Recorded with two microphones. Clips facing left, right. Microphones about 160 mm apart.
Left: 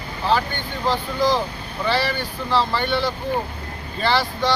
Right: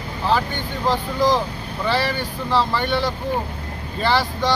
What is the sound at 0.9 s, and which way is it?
Speech, 15° right (ahead or behind).